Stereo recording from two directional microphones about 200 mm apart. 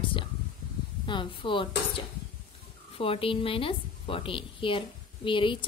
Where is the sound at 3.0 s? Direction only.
25° left (ahead or behind).